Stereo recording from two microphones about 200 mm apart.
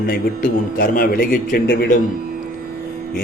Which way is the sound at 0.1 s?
45° left (ahead or behind).